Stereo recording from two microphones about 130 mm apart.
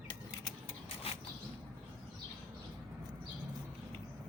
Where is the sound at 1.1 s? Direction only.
50° left (ahead or behind).